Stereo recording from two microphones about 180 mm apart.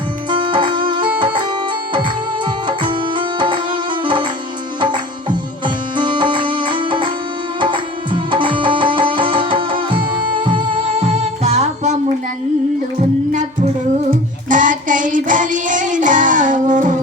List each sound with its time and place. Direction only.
0.3 s music: 25° right (ahead or behind)
2.6 s music: 25° right (ahead or behind)
5.6 s music: 25° right (ahead or behind)
13.3 s music: 40° right (ahead or behind)
14.1 s child singing: 45° right (ahead or behind)